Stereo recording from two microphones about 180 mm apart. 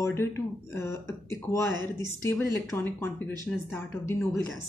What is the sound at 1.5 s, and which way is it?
Speech, 15° left (ahead or behind).